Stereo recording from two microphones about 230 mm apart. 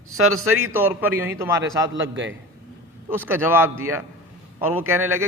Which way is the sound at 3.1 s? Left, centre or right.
Centre.